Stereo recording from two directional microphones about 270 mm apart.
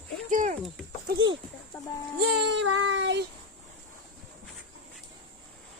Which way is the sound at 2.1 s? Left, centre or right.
Right.